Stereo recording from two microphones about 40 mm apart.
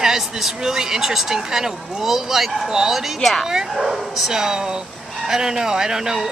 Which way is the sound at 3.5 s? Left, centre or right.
Centre.